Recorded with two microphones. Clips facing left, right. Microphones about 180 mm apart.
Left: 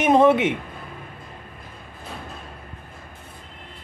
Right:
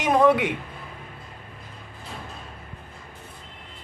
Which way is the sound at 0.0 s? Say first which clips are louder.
Left 3 dB; 25° left (ahead or behind).